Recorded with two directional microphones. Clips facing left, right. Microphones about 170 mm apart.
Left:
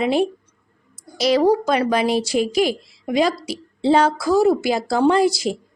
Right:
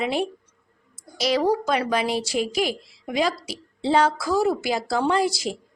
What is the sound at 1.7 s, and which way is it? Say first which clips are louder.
Speech: left 5 dB; 30° left (ahead or behind).